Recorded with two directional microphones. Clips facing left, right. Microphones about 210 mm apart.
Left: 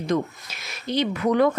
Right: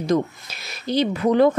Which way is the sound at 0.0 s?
35° right (ahead or behind).